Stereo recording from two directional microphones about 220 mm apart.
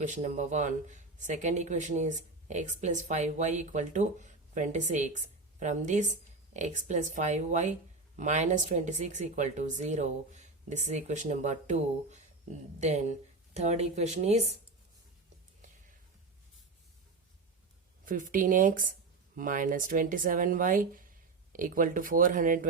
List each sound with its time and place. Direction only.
0.0 s speech: 35° right (ahead or behind)
18.0 s speech: 40° right (ahead or behind)